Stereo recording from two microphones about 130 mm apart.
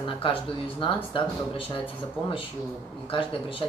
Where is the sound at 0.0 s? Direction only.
40° left (ahead or behind).